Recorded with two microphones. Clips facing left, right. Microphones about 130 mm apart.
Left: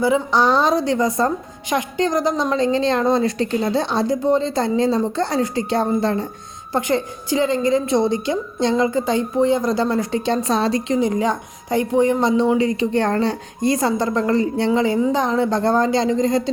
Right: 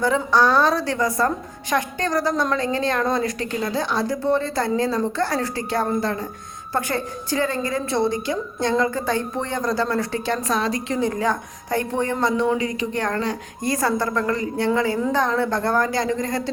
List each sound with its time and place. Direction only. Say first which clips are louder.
0.0 s a woman's voice: left 2 dB; 15° left (ahead or behind)